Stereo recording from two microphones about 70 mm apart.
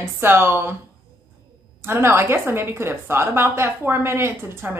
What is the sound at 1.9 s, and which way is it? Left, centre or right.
Speech, right.